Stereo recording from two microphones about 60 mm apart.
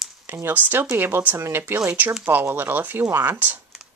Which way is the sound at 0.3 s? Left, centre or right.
Right.